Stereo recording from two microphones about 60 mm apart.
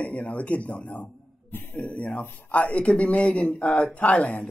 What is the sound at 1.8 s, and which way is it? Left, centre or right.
A man's voice, left.